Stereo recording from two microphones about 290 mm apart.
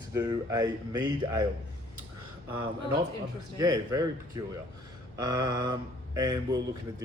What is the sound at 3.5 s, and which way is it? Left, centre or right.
Speech, centre.